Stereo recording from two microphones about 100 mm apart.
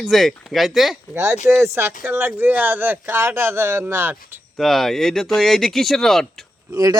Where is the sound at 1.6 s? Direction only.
25° right (ahead or behind).